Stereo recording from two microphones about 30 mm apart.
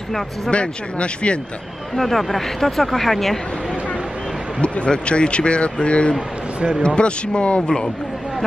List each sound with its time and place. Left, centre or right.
0.5 s speech: left
2.0 s speech: centre
4.6 s speech: left
6.1 s speech: right
7.0 s speech: left
7.6 s speech: left